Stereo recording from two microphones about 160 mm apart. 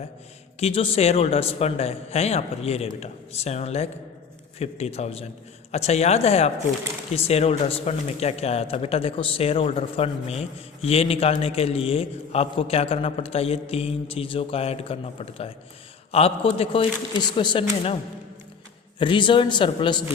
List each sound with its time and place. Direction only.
0.6 s speech: 40° left (ahead or behind)
18.9 s a man's voice: 30° left (ahead or behind)